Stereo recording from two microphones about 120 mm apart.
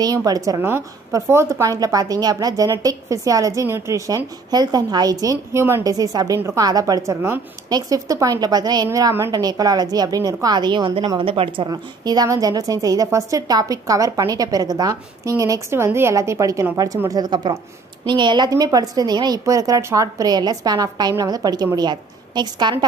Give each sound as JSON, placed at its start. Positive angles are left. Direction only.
{"t": 0.0, "sound": "a woman's voice", "side_deg": -30}
{"t": 0.6, "sound": "a woman's voice", "side_deg": -20}
{"t": 11.7, "sound": "a woman's voice", "side_deg": -35}